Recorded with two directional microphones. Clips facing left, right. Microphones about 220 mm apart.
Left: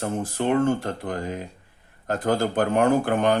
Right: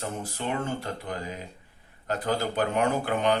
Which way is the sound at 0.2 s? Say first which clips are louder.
Left 13 dB; 50° left (ahead or behind).